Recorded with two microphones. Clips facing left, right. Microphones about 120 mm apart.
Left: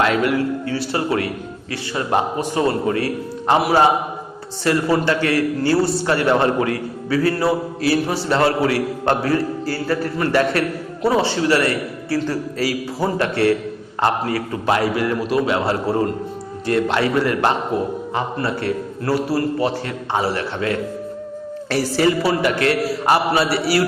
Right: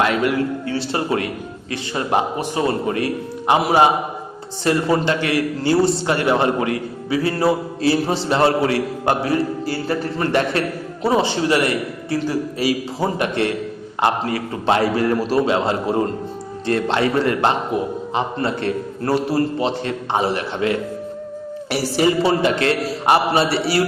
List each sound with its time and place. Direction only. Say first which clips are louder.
0.0 s a man's voice: left 1 dB; 20° right (ahead or behind)
14.5 s a man's voice: right 2 dB; 30° right (ahead or behind)
15.4 s a man's voice: right 1 dB; 20° right (ahead or behind)